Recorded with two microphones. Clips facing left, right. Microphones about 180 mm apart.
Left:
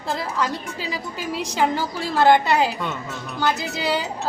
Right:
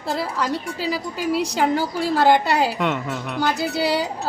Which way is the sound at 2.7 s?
75° right (ahead or behind).